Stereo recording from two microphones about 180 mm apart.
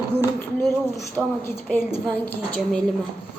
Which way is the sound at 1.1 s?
10° left (ahead or behind).